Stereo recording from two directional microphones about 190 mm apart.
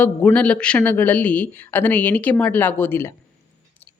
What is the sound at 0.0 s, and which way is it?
Speech, 10° left (ahead or behind).